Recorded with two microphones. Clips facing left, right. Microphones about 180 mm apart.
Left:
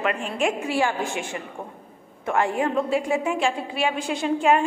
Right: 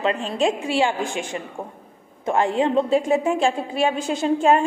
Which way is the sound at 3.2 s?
40° right (ahead or behind).